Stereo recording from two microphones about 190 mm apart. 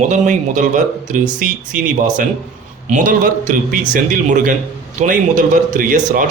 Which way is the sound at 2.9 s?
45° right (ahead or behind).